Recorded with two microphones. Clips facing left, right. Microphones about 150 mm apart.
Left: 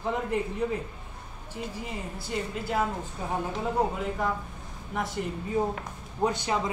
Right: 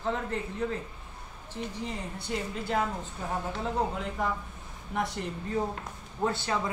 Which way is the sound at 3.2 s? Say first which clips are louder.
Left 2 dB; 15° left (ahead or behind).